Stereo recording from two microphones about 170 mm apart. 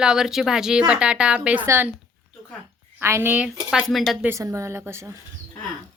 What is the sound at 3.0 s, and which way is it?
A woman's voice, 15° right (ahead or behind).